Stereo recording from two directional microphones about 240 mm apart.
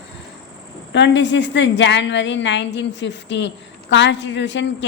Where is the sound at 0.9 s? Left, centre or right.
Left.